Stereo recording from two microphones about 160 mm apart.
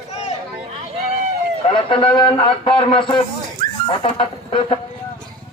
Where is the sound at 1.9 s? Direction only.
35° left (ahead or behind).